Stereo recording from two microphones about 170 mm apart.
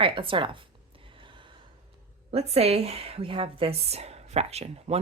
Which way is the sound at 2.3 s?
35° right (ahead or behind).